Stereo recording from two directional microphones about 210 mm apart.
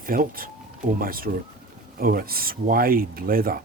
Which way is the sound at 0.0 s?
45° right (ahead or behind).